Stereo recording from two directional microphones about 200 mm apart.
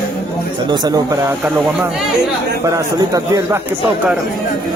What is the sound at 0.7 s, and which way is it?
Speech, 20° right (ahead or behind).